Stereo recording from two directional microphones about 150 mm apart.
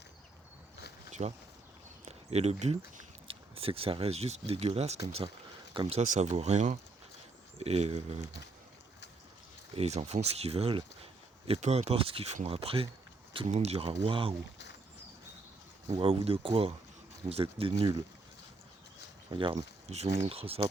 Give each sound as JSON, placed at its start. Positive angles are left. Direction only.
{"t": 1.2, "sound": "speech", "side_deg": -50}
{"t": 6.0, "sound": "speech", "side_deg": -50}
{"t": 9.7, "sound": "speech", "side_deg": -45}
{"t": 15.9, "sound": "speech", "side_deg": -40}
{"t": 19.3, "sound": "speech", "side_deg": -35}